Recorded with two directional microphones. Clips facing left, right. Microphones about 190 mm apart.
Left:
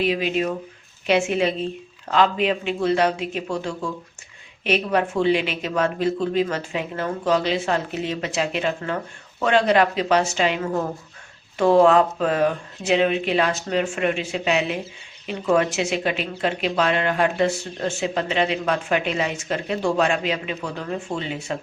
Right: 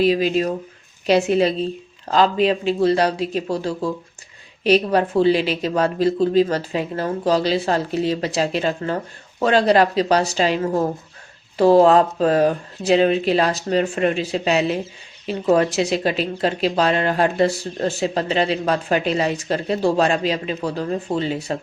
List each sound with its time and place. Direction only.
0.0 s speech: 35° right (ahead or behind)